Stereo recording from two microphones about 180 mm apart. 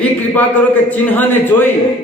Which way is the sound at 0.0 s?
10° left (ahead or behind).